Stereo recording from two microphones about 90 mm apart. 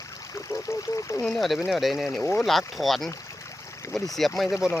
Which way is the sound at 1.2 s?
Centre (ahead or behind).